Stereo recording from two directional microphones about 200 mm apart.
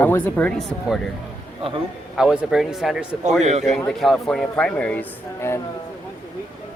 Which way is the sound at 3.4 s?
35° right (ahead or behind).